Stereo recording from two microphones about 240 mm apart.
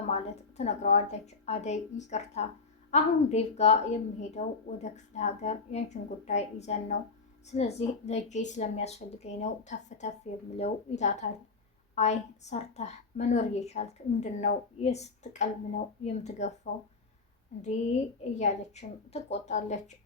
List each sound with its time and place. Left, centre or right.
0.1 s a woman's voice: left
17.6 s a woman's voice: left